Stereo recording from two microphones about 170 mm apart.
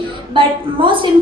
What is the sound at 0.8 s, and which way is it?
Speech, 30° right (ahead or behind).